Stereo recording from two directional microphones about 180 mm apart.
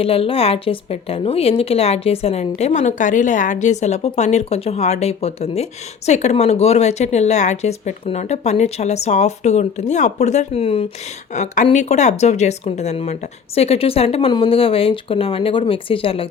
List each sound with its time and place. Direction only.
0.0 s a woman's voice: 30° left (ahead or behind)